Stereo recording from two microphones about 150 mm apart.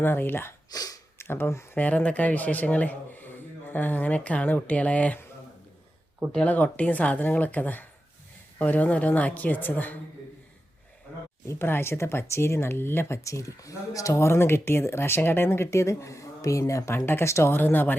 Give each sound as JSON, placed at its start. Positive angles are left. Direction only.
{"t": 0.0, "sound": "speech", "side_deg": 15}
{"t": 6.3, "sound": "speech", "side_deg": 10}
{"t": 11.4, "sound": "speech", "side_deg": 15}